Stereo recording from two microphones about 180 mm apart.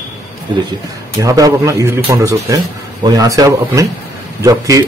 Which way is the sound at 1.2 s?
20° right (ahead or behind).